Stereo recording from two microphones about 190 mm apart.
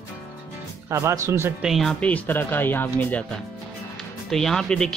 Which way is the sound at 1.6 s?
Centre (ahead or behind).